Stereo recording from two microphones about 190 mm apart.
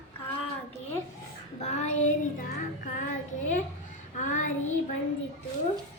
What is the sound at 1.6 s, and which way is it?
Child singing, 35° left (ahead or behind).